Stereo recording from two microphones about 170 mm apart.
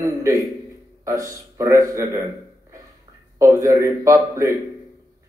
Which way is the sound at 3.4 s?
15° right (ahead or behind).